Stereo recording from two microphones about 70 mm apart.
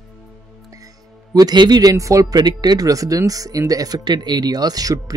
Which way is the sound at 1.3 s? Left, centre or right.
Right.